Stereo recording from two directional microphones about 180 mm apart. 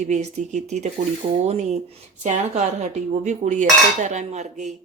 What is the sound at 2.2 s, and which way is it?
Speech, 40° right (ahead or behind).